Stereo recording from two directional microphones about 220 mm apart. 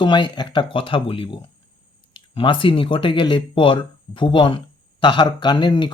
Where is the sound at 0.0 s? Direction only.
20° left (ahead or behind).